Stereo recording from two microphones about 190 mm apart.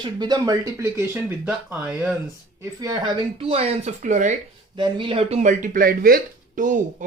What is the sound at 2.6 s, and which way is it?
Speech, 20° right (ahead or behind).